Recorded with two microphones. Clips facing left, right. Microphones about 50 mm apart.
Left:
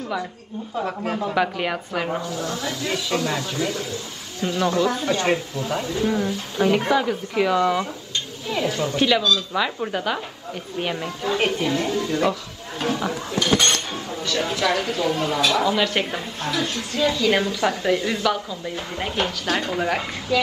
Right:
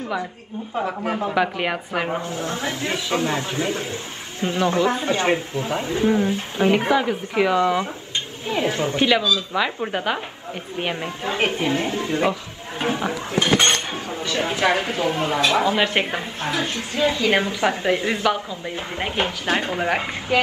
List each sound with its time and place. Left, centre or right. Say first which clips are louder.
0.8 s a woman's voice: right 1 dB; centre
2.2 s speech: right 1 dB; right